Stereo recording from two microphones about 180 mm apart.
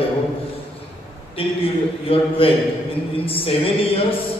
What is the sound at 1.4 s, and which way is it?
A man's voice, 30° left (ahead or behind).